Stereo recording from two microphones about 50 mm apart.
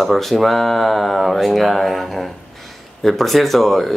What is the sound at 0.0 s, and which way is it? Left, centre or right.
Speech, centre.